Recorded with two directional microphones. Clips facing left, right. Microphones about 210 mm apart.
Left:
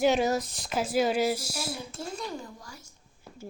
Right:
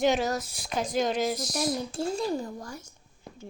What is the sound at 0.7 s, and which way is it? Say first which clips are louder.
Speech: left 1 dB; 5° left (ahead or behind).